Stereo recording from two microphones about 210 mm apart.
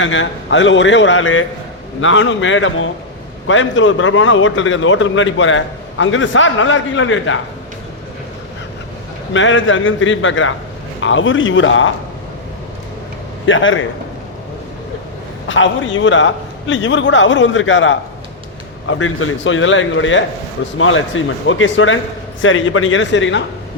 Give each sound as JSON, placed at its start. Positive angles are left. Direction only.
{"t": 0.0, "sound": "a man's voice", "side_deg": 60}
{"t": 9.3, "sound": "a man's voice", "side_deg": 65}
{"t": 13.4, "sound": "a man's voice", "side_deg": 65}
{"t": 15.4, "sound": "a man's voice", "side_deg": 65}